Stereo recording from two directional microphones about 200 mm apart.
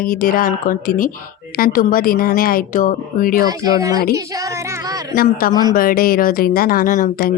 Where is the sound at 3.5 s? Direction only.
15° right (ahead or behind).